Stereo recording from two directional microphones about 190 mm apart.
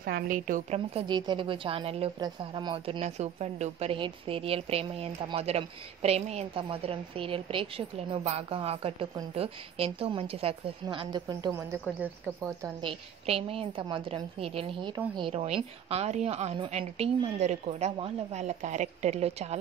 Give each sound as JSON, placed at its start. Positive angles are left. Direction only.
{"t": 0.0, "sound": "a woman's voice", "side_deg": -50}
{"t": 0.7, "sound": "a woman's voice", "side_deg": -25}
{"t": 3.2, "sound": "a woman's voice", "side_deg": -35}
{"t": 12.8, "sound": "a woman's voice", "side_deg": -30}